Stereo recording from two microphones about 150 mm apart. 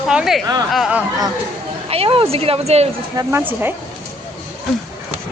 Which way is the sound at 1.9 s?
40° right (ahead or behind).